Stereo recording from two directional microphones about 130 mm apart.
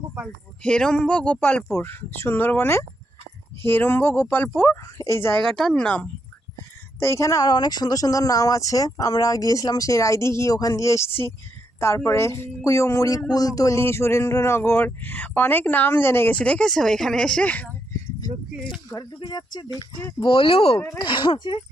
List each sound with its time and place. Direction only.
0.6 s speech: 5° left (ahead or behind)
5.5 s speech: 5° left (ahead or behind)
7.0 s speech: 25° left (ahead or behind)
18.9 s speech: 30° left (ahead or behind)
20.7 s speech: 20° left (ahead or behind)
21.0 s speech: 40° left (ahead or behind)